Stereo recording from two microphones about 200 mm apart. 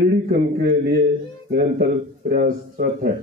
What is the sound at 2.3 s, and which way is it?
Speech, 45° right (ahead or behind).